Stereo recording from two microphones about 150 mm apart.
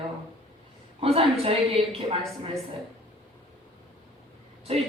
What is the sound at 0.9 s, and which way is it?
A woman's voice, 40° right (ahead or behind).